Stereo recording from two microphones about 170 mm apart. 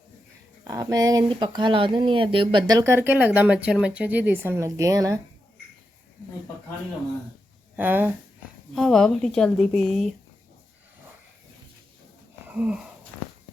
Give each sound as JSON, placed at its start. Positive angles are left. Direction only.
{"t": 0.7, "sound": "speech", "side_deg": -20}
{"t": 7.8, "sound": "speech", "side_deg": -10}
{"t": 8.7, "sound": "a woman's voice", "side_deg": 5}
{"t": 12.5, "sound": "wheeze", "side_deg": -5}